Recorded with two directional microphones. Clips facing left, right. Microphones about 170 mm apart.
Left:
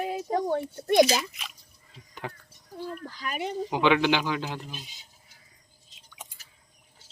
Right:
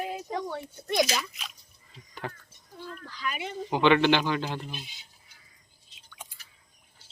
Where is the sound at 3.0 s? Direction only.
45° left (ahead or behind).